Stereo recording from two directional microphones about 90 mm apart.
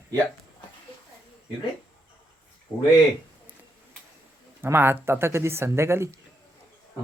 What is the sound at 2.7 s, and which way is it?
Speech, 50° left (ahead or behind).